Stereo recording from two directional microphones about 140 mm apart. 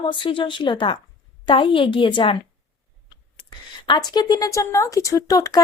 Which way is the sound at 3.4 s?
30° left (ahead or behind).